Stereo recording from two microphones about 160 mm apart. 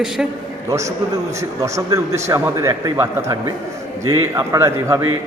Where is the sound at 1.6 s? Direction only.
20° right (ahead or behind).